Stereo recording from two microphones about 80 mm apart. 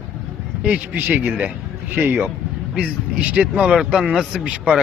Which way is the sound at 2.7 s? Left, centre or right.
Centre.